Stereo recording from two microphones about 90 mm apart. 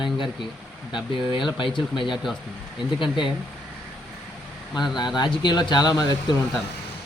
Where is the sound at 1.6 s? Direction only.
65° left (ahead or behind).